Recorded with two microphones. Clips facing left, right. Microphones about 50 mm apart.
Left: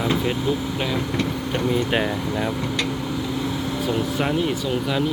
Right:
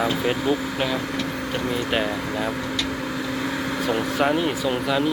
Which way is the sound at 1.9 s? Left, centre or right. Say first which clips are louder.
Left 1 dB; centre.